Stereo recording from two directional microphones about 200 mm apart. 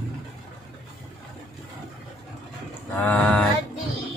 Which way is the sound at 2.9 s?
5° left (ahead or behind).